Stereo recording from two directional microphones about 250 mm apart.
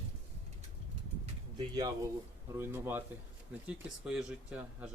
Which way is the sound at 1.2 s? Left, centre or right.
Centre.